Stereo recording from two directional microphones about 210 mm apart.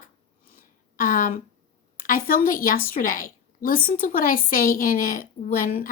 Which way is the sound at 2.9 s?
40° left (ahead or behind).